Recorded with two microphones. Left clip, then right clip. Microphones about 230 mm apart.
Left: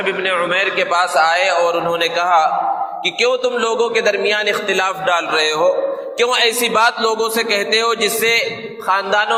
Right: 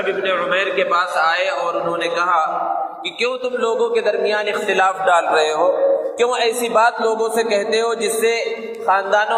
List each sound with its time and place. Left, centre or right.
0.3 s a man's voice: left